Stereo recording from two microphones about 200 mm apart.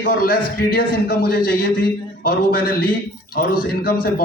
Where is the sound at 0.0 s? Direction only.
50° left (ahead or behind).